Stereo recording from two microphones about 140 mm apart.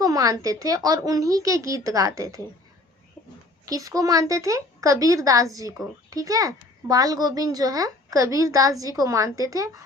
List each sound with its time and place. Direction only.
0.0 s speech: 25° right (ahead or behind)
3.7 s speech: 25° right (ahead or behind)